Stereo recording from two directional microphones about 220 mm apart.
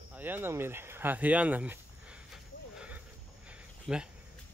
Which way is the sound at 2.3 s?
5° right (ahead or behind).